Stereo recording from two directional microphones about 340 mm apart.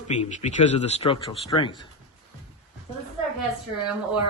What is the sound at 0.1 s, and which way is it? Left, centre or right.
Speech, left.